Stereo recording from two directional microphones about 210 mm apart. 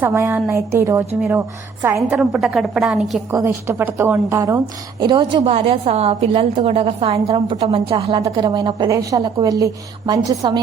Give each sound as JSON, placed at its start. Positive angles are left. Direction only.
{"t": 0.0, "sound": "a woman's voice", "side_deg": -10}